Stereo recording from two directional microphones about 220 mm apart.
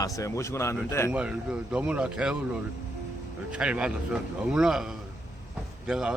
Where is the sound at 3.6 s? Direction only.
5° right (ahead or behind).